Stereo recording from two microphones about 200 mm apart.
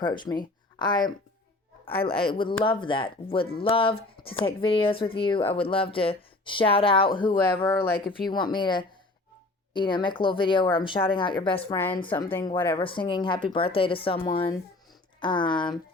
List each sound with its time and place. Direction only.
0.0 s speech: 25° left (ahead or behind)
11.7 s speech: 10° left (ahead or behind)
12.7 s speech: 25° left (ahead or behind)